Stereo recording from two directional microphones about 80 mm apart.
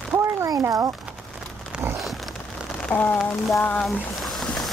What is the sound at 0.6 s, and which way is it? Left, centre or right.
Speech, right.